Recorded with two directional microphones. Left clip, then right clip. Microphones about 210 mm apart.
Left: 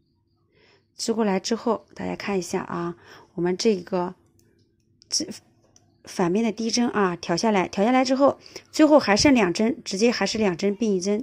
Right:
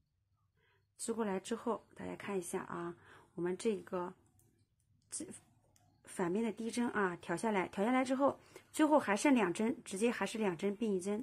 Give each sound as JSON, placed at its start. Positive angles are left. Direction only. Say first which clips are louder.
{"t": 0.6, "sound": "speech", "louder": "left 18 dB", "side_deg": 40}
{"t": 6.0, "sound": "speech", "louder": "left 13 dB", "side_deg": 35}